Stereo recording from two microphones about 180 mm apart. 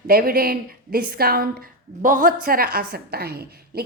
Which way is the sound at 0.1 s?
55° right (ahead or behind).